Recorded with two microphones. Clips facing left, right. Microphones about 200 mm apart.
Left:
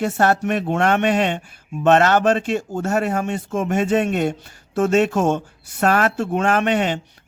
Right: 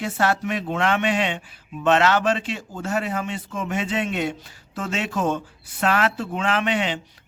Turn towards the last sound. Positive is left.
turn(degrees=45)  # may be behind; listen again after turning